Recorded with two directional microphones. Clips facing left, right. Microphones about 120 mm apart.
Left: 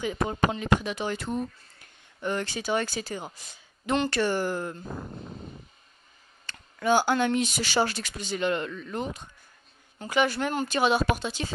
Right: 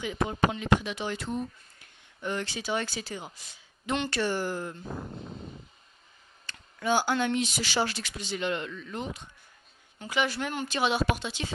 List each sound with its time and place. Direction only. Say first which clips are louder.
0.0 s speech: left 1 dB; 40° left (ahead or behind)
6.4 s speech: left 4 dB; 50° left (ahead or behind)